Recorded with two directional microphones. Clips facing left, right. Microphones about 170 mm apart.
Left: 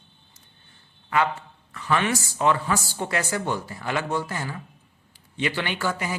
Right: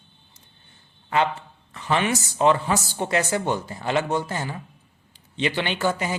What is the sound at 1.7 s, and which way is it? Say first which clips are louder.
A man's voice: right 1 dB; 25° right (ahead or behind).